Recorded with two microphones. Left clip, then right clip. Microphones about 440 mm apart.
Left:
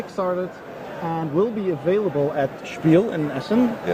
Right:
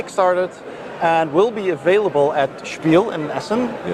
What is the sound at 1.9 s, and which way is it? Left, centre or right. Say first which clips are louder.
Speech: right 6 dB; right.